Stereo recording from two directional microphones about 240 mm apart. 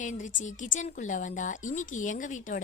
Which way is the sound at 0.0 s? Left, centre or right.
Left.